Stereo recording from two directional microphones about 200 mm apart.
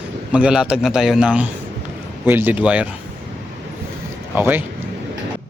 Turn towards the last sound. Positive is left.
turn(degrees=-10)  # may be behind; listen again after turning